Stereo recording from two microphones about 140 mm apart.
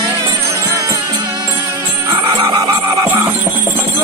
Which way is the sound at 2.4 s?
30° right (ahead or behind).